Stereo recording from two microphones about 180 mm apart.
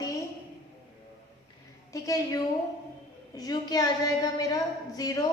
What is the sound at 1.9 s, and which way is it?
A woman's voice, 20° left (ahead or behind).